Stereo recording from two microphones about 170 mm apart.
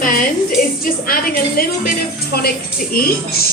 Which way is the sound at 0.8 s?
60° left (ahead or behind).